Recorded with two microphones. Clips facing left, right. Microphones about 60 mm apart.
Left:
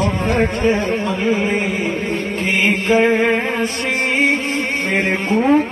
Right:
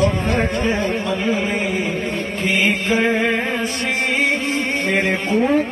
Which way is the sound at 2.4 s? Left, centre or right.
Left.